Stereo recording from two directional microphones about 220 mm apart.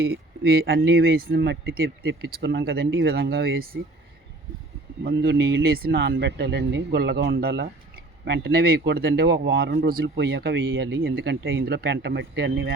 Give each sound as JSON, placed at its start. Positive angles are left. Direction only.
{"t": 0.0, "sound": "speech", "side_deg": -45}
{"t": 5.0, "sound": "speech", "side_deg": -50}